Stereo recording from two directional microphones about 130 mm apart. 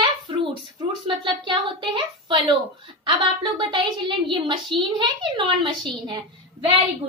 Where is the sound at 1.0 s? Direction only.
40° right (ahead or behind).